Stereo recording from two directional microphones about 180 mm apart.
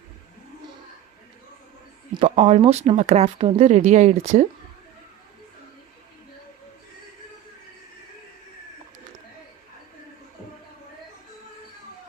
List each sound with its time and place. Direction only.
2.1 s speech: 35° right (ahead or behind)